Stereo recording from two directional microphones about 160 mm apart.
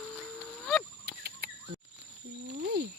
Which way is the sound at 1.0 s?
85° right.